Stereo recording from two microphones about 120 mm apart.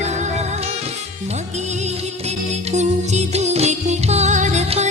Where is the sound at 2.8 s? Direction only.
70° right (ahead or behind).